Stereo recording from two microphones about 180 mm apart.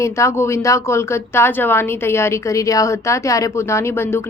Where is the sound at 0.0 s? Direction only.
15° left (ahead or behind).